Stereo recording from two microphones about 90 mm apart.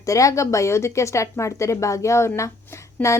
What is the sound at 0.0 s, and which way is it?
A woman's voice, 35° left (ahead or behind).